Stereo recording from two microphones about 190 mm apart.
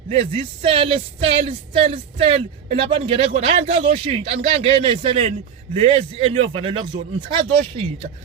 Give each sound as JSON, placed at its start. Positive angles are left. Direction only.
{"t": 0.1, "sound": "speech", "side_deg": -30}